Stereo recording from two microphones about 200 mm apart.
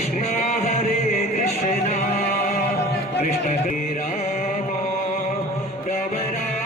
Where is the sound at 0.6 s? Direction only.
35° left (ahead or behind).